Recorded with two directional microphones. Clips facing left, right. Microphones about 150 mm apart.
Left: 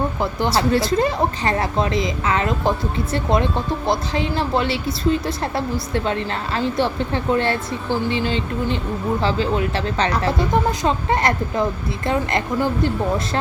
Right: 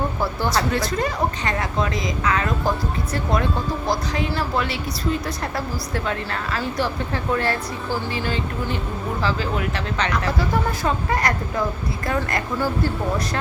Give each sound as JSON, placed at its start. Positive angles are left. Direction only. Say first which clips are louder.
{"t": 0.2, "sound": "speech", "louder": "left 3 dB", "side_deg": 20}